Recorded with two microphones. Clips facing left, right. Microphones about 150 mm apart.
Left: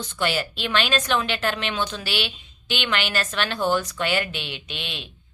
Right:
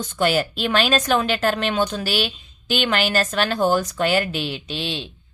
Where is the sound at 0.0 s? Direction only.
45° right (ahead or behind).